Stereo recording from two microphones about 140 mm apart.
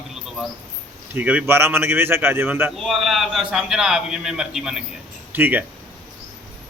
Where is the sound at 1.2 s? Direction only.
10° right (ahead or behind).